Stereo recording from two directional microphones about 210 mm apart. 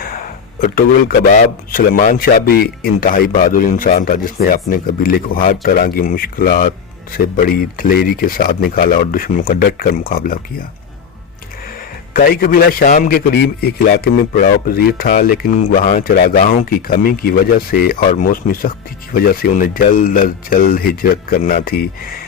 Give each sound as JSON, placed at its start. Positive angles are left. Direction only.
{"t": 0.6, "sound": "a man's voice", "side_deg": 40}
{"t": 12.1, "sound": "a man's voice", "side_deg": 45}